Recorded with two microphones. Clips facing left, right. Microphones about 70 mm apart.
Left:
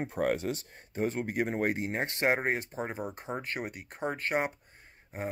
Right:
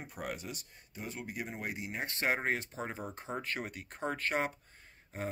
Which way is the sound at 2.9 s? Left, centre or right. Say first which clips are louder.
Left 4 dB; centre.